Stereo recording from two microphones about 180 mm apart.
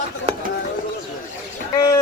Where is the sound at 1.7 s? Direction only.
20° left (ahead or behind).